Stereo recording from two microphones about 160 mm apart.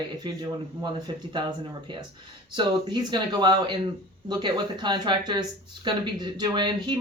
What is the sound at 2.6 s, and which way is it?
Speech, 30° right (ahead or behind).